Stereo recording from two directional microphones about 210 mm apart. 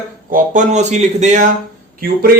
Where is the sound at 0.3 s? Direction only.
40° right (ahead or behind).